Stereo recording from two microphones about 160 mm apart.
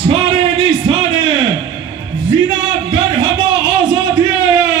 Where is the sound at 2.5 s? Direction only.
30° right (ahead or behind).